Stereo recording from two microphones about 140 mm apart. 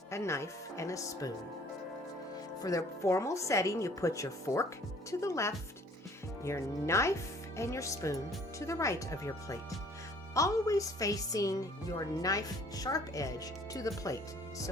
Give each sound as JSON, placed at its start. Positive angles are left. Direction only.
{"t": 0.1, "sound": "speech", "side_deg": 20}
{"t": 2.6, "sound": "speech", "side_deg": 25}